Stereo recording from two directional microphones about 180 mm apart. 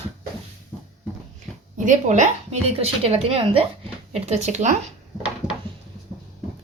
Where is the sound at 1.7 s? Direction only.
45° right (ahead or behind).